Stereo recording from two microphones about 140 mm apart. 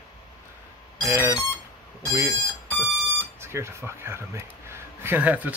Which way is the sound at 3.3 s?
20° right (ahead or behind).